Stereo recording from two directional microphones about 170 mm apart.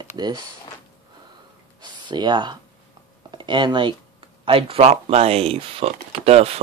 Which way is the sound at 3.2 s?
25° right (ahead or behind).